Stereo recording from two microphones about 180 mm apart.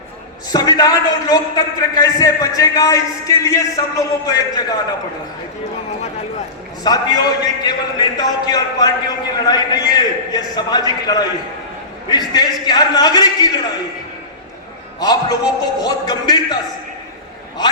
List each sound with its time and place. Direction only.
0.5 s a man's voice: 20° left (ahead or behind)
6.8 s a man's voice: 20° left (ahead or behind)
15.0 s a man's voice: 20° left (ahead or behind)